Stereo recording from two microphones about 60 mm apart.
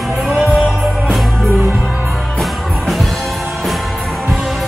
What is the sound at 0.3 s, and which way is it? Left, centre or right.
Music, centre.